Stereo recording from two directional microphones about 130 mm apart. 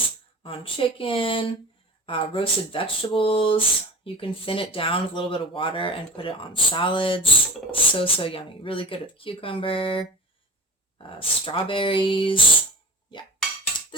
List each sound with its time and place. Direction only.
0.4 s speech: 45° left (ahead or behind)